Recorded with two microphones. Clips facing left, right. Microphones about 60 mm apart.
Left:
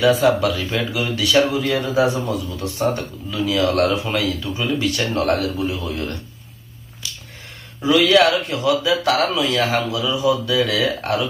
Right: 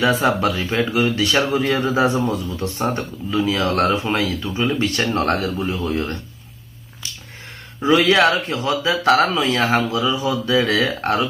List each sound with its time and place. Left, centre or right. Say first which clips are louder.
0.0 s speech: left 2 dB; right
7.8 s speech: even; right